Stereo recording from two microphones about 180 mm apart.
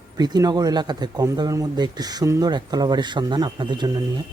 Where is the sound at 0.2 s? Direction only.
20° right (ahead or behind).